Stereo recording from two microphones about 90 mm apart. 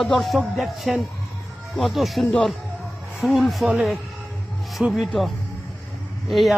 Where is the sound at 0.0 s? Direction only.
5° left (ahead or behind).